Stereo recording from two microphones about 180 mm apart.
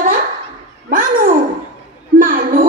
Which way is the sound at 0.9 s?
50° right (ahead or behind).